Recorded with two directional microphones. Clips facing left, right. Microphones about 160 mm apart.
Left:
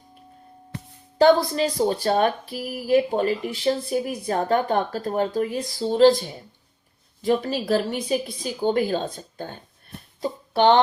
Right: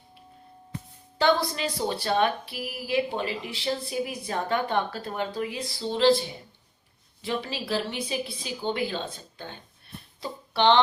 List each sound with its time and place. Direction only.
0.7 s music: 75° left (ahead or behind)
1.2 s speech: 40° left (ahead or behind)
10.2 s a sound: 45° left (ahead or behind)